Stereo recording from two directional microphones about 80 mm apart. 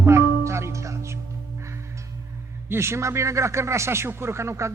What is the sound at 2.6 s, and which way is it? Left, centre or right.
A man's voice, right.